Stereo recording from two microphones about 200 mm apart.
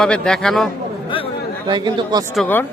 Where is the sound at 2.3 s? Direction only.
10° left (ahead or behind).